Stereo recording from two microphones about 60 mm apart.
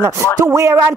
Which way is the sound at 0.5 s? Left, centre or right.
Right.